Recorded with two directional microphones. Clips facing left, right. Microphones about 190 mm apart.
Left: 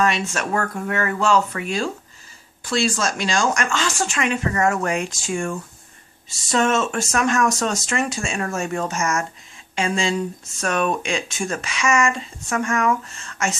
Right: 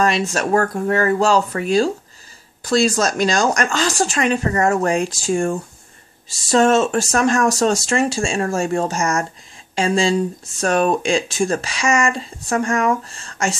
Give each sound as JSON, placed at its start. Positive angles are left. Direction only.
{"t": 0.0, "sound": "speech", "side_deg": -35}